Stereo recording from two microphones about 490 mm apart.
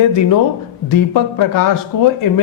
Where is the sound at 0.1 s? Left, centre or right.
Left.